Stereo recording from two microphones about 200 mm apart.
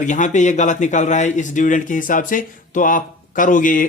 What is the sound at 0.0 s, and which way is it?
Speech, 40° left (ahead or behind).